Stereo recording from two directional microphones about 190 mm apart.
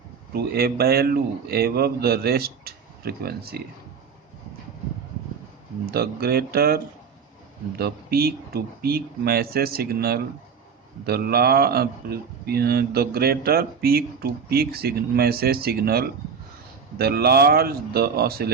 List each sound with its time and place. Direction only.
0.3 s a man's voice: 55° right (ahead or behind)
5.8 s a man's voice: 55° right (ahead or behind)